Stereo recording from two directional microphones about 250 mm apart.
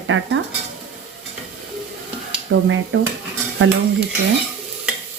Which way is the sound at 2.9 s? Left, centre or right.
Right.